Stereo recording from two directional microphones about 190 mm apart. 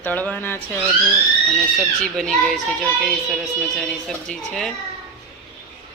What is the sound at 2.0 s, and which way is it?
Speech, centre (ahead or behind).